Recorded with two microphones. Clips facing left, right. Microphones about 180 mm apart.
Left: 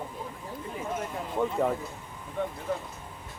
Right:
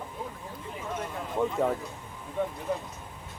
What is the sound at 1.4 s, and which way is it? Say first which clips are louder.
Speech: even; centre (ahead or behind).